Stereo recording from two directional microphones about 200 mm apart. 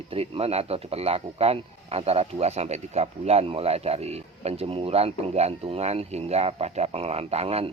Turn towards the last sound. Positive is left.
turn(degrees=-30)  # may be behind; listen again after turning